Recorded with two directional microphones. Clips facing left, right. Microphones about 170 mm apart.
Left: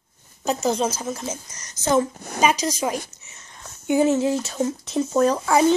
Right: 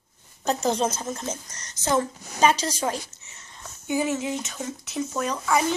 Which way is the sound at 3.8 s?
25° left (ahead or behind).